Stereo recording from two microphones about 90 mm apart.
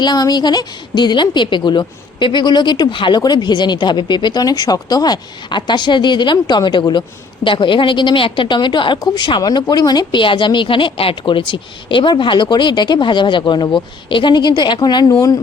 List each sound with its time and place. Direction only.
0.0 s a woman's voice: 50° left (ahead or behind)
7.4 s a woman's voice: 70° left (ahead or behind); by 15.1 s 50° left (ahead or behind)